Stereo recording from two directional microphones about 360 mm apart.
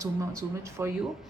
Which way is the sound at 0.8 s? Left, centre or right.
Centre.